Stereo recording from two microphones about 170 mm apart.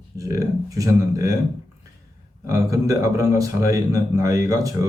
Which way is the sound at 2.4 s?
20° right (ahead or behind).